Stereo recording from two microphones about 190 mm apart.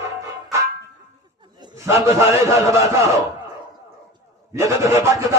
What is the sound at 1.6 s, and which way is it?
Rub, 15° right (ahead or behind).